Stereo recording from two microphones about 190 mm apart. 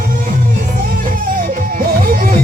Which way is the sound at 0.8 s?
45° right (ahead or behind).